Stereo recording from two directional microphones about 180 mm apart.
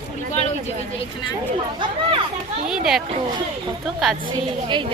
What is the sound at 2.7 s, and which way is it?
Speech, 5° right (ahead or behind).